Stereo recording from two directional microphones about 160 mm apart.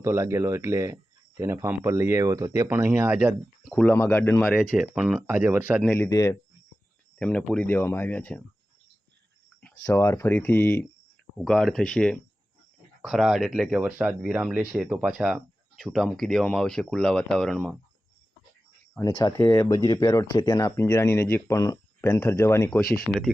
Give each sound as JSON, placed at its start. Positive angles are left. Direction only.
{"t": 0.0, "sound": "speech", "side_deg": -15}
{"t": 3.7, "sound": "speech", "side_deg": 5}
{"t": 4.6, "sound": "speech", "side_deg": -5}
{"t": 5.8, "sound": "speech", "side_deg": 5}
{"t": 6.1, "sound": "speech", "side_deg": 20}
{"t": 7.2, "sound": "speech", "side_deg": 5}
{"t": 9.8, "sound": "speech", "side_deg": 15}
{"t": 18.9, "sound": "speech", "side_deg": 25}
{"t": 19.4, "sound": "speech", "side_deg": 15}
{"t": 22.0, "sound": "speech", "side_deg": 10}